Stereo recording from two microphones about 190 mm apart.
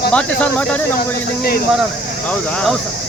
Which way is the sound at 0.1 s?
5° left (ahead or behind).